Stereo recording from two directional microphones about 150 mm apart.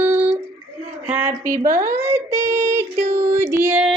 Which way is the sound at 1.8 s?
15° right (ahead or behind).